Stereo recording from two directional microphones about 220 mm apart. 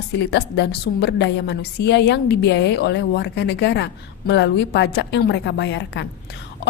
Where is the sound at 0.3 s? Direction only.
50° left (ahead or behind).